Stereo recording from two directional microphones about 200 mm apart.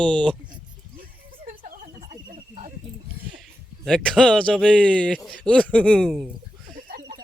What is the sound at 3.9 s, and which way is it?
A man's voice, centre (ahead or behind).